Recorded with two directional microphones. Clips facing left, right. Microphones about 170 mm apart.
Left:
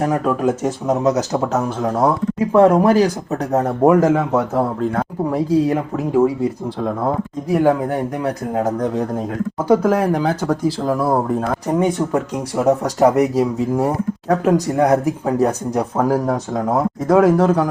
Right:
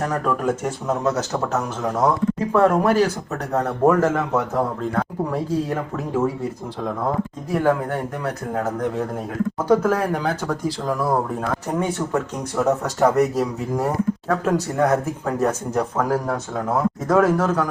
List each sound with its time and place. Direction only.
0.0 s speech: 15° left (ahead or behind)
5.3 s speech: 15° left (ahead or behind)
7.5 s speech: 15° left (ahead or behind)
11.4 s speech: 25° left (ahead or behind)
12.5 s speech: 10° left (ahead or behind)
17.3 s speech: 30° left (ahead or behind)